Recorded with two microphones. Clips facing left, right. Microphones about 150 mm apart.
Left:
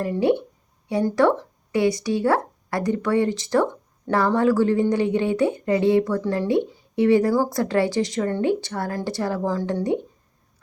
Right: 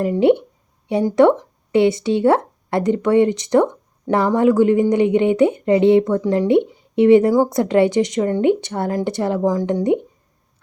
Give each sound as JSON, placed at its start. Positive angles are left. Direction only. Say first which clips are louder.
{"t": 0.0, "sound": "speech", "louder": "right 6 dB", "side_deg": -20}